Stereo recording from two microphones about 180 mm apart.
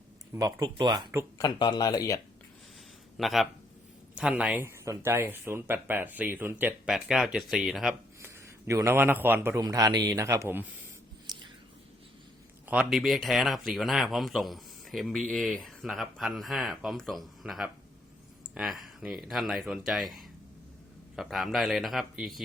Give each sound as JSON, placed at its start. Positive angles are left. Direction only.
{"t": 0.3, "sound": "speech", "side_deg": -20}
{"t": 1.4, "sound": "speech", "side_deg": 25}
{"t": 3.2, "sound": "speech", "side_deg": 0}
{"t": 8.2, "sound": "speech", "side_deg": -15}
{"t": 12.6, "sound": "speech", "side_deg": -5}